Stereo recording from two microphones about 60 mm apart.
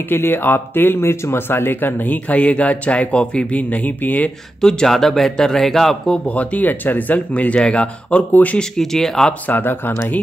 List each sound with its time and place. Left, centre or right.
0.1 s speech: left
4.6 s speech: centre
6.2 s speech: left
8.5 s speech: centre
9.5 s speech: left